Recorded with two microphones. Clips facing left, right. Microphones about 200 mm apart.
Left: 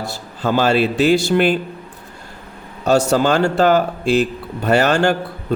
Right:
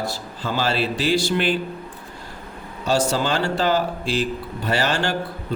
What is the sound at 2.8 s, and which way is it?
Speech, 50° left (ahead or behind).